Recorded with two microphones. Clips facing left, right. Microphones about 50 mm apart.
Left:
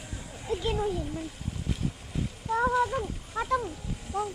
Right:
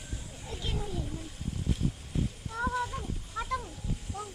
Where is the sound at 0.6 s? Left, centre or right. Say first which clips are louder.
Left 6 dB; left.